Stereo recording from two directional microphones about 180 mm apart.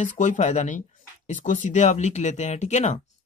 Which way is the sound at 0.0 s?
45° left (ahead or behind).